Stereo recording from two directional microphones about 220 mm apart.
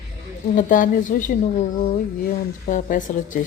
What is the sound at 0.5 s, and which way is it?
Speech, 35° left (ahead or behind).